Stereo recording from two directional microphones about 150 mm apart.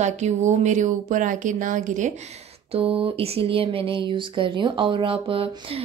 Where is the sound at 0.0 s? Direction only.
50° right (ahead or behind).